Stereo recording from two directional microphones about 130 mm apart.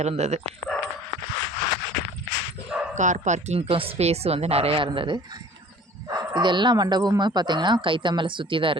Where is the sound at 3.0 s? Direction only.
70° right (ahead or behind).